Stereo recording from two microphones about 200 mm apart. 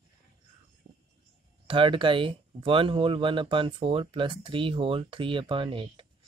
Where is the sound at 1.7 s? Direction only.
25° right (ahead or behind).